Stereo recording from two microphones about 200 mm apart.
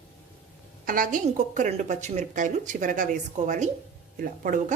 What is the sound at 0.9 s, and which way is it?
Speech, 45° right (ahead or behind).